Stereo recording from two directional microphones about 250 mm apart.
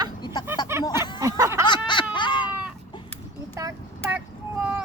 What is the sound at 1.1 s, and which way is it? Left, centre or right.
Snicker, centre.